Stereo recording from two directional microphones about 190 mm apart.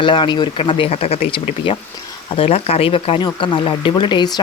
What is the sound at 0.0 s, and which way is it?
Speech, 25° left (ahead or behind).